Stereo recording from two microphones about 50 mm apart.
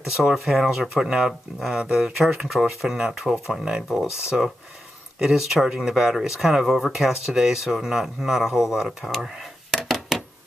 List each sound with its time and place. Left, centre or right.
0.2 s speech: centre
9.0 s speech: centre
9.7 s a sound: centre